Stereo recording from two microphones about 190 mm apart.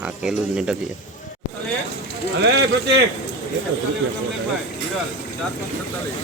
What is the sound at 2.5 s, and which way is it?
Speech, 70° right (ahead or behind).